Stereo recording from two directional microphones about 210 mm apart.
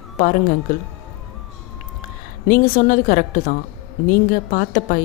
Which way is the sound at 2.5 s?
40° left (ahead or behind).